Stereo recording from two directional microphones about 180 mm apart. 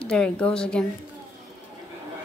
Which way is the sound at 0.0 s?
5° left (ahead or behind).